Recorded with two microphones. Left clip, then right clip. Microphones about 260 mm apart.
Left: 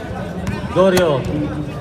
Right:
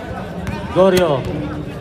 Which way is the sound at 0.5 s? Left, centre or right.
Right.